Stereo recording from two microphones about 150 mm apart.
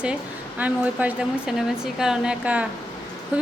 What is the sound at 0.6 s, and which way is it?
A woman's voice, 10° right (ahead or behind).